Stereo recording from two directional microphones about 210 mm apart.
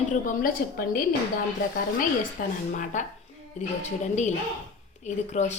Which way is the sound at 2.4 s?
40° left (ahead or behind).